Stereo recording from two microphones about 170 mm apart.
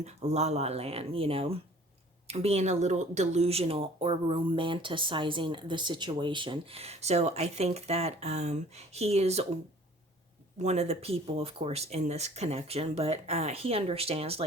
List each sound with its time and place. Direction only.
0.0 s speech: 40° right (ahead or behind)
10.6 s speech: 40° right (ahead or behind)